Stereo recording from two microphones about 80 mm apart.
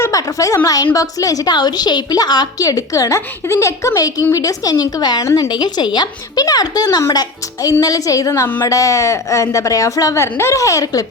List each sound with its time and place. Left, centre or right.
0.1 s a woman's voice: left
1.5 s a woman's voice: left
2.6 s a woman's voice: left
5.2 s speech: left
5.5 s a woman's voice: left